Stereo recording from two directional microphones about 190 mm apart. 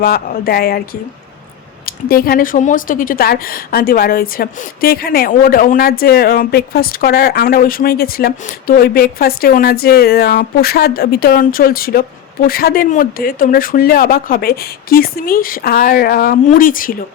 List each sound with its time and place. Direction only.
0.0 s a woman's voice: 50° left (ahead or behind)
2.0 s a woman's voice: 50° left (ahead or behind)